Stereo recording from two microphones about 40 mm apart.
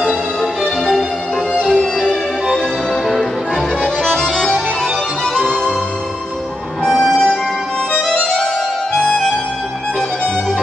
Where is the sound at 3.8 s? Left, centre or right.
Centre.